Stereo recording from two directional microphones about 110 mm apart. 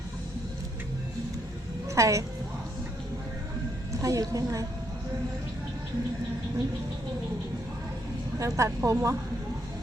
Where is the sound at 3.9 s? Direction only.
30° right (ahead or behind).